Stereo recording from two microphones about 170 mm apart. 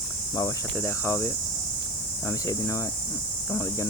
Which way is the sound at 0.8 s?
15° left (ahead or behind).